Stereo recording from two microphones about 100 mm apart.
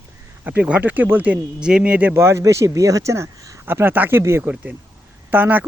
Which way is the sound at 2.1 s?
25° right (ahead or behind).